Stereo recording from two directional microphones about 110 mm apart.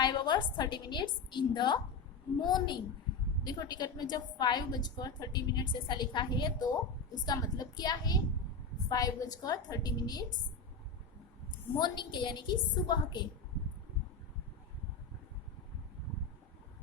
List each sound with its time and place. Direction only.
0.0 s a woman's voice: 45° left (ahead or behind)
11.8 s a woman's voice: 45° left (ahead or behind)